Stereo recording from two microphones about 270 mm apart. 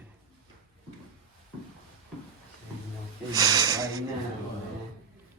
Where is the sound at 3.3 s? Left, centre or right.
Centre.